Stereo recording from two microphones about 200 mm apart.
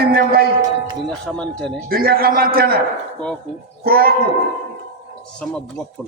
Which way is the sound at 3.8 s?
50° right (ahead or behind).